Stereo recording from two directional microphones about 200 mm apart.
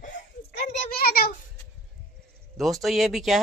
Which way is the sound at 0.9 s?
50° left (ahead or behind).